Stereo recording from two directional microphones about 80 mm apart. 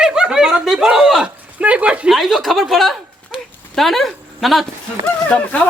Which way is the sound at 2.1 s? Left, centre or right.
Centre.